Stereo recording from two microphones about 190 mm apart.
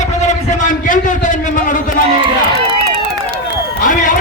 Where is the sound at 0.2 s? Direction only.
40° left (ahead or behind).